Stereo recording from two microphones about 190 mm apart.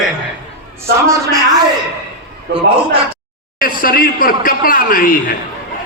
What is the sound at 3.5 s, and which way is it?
A man's voice, 50° left (ahead or behind).